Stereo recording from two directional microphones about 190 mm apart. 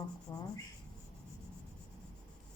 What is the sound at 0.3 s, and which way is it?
Rub, 20° left (ahead or behind).